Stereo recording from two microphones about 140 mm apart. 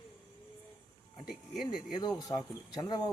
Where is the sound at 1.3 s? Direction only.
5° right (ahead or behind).